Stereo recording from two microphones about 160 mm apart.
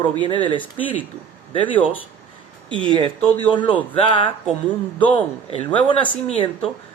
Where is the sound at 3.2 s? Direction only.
10° left (ahead or behind).